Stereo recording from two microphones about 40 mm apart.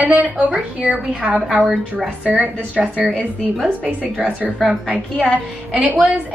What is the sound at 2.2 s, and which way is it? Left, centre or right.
A woman's voice, right.